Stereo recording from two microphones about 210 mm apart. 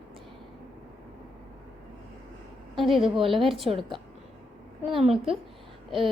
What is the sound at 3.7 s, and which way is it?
Speech, 25° right (ahead or behind).